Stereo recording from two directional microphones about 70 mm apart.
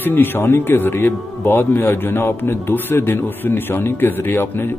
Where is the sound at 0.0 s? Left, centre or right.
Left.